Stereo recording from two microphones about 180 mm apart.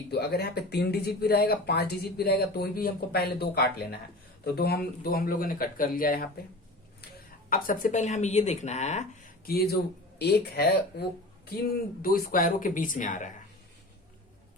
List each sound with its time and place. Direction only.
0.1 s speech: 60° left (ahead or behind)
7.5 s speech: 50° left (ahead or behind)
9.5 s speech: 60° left (ahead or behind)
12.0 s speech: 55° left (ahead or behind)